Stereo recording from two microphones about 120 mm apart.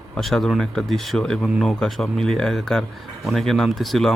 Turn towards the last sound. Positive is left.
turn(degrees=0)  # may be behind; listen again after turning